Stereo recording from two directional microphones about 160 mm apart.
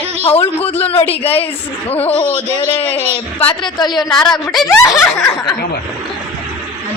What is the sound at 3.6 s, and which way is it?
Speech, 25° left (ahead or behind).